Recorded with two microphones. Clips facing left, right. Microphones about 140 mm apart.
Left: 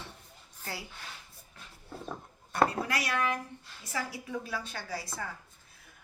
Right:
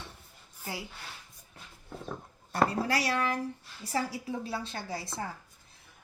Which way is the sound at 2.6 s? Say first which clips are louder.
Right 3 dB; 30° right (ahead or behind).